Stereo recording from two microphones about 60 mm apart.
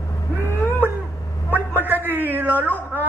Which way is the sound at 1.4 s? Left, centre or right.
Right.